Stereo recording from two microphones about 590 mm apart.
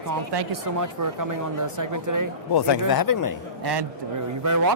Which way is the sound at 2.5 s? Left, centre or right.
Left.